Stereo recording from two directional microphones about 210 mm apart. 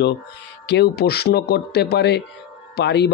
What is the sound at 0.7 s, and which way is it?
Speech, 55° left (ahead or behind).